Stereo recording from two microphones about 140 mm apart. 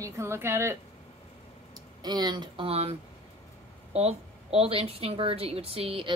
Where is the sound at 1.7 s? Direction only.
30° right (ahead or behind).